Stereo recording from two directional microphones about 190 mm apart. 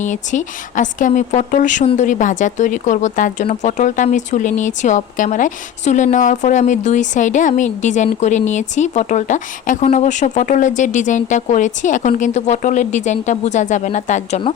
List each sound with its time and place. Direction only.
0.0 s a woman's voice: 40° left (ahead or behind)